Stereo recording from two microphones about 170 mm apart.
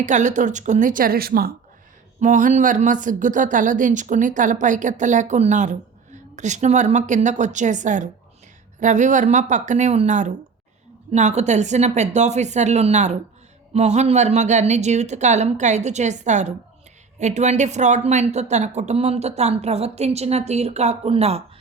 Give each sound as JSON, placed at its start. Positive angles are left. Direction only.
{"t": 0.0, "sound": "speech", "side_deg": -45}
{"t": 2.2, "sound": "speech", "side_deg": -45}